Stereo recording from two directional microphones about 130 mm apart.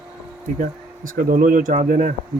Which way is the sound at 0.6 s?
90° right.